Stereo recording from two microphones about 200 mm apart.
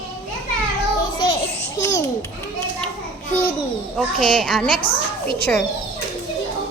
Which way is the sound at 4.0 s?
Centre (ahead or behind).